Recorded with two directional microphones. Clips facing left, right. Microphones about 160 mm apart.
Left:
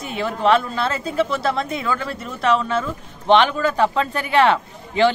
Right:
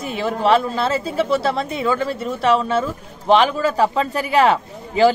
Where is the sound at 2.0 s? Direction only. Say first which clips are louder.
Right 3 dB; 5° right (ahead or behind).